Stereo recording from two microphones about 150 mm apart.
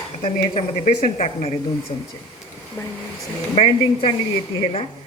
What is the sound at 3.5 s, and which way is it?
Speech, 40° left (ahead or behind).